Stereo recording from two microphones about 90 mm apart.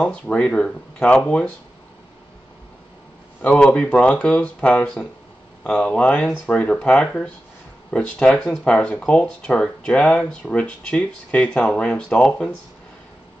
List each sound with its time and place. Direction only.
0.0 s speech: 10° left (ahead or behind)
3.4 s speech: 10° left (ahead or behind)